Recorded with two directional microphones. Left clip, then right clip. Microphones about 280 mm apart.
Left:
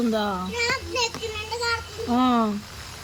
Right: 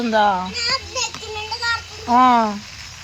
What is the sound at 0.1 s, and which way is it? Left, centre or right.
Speech, centre.